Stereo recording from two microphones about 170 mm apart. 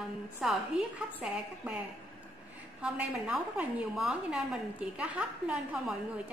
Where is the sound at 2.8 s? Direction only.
5° right (ahead or behind).